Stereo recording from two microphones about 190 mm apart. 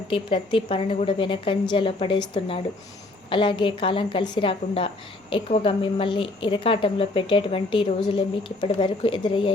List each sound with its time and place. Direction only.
0.1 s speech: 25° left (ahead or behind)